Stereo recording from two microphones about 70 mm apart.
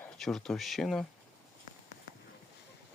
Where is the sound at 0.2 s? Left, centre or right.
Centre.